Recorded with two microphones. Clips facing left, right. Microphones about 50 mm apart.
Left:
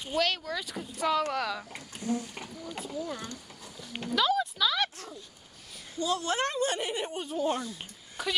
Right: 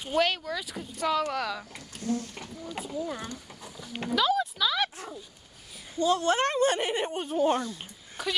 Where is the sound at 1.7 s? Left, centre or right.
Centre.